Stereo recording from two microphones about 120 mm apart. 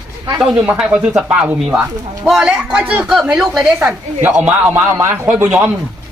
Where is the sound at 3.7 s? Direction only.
15° right (ahead or behind).